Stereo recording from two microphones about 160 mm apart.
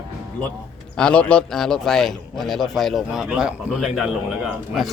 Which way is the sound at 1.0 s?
5° left (ahead or behind).